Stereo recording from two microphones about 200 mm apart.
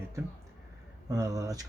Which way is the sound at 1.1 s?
15° right (ahead or behind).